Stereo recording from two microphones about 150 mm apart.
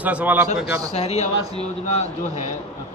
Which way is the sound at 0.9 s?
45° left (ahead or behind).